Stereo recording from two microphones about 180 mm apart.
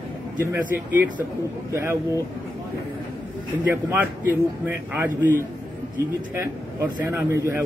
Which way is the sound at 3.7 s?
10° right (ahead or behind).